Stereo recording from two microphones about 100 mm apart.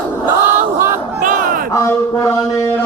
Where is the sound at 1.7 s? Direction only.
30° left (ahead or behind).